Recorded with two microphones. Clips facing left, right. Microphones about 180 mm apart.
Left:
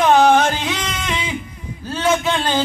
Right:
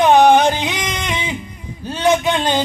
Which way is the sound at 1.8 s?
15° right (ahead or behind).